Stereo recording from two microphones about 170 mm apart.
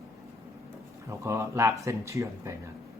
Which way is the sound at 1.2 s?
15° right (ahead or behind).